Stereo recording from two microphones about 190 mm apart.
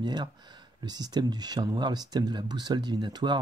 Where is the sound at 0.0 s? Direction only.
25° right (ahead or behind).